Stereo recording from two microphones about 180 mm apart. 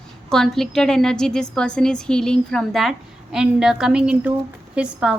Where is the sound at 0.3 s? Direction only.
Centre (ahead or behind).